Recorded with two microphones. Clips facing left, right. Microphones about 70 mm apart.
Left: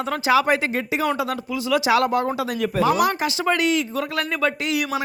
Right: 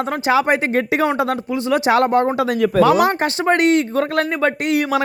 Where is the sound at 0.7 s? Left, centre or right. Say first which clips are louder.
Right 6 dB; right.